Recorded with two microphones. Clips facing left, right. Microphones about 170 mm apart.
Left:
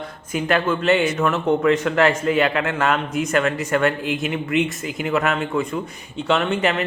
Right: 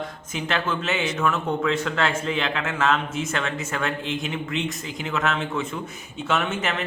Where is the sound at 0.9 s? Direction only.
60° left (ahead or behind).